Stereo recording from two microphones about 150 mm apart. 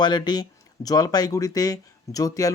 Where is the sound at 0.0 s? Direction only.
30° left (ahead or behind).